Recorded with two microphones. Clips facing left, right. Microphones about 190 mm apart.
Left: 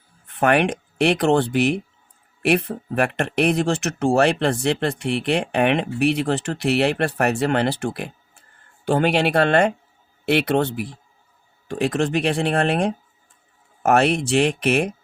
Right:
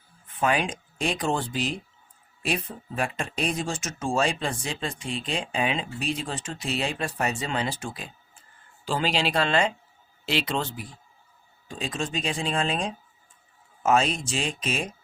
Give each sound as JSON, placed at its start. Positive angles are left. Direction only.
{"t": 0.3, "sound": "speech", "side_deg": 65}